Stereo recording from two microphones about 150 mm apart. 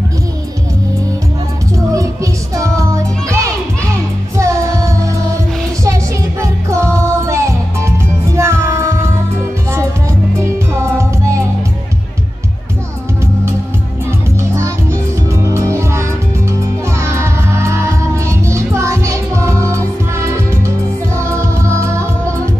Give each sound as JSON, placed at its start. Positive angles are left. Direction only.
{"t": 2.5, "sound": "music", "side_deg": -20}
{"t": 6.4, "sound": "music", "side_deg": -20}
{"t": 10.4, "sound": "music", "side_deg": -20}
{"t": 14.5, "sound": "music", "side_deg": -20}
{"t": 17.0, "sound": "music", "side_deg": -20}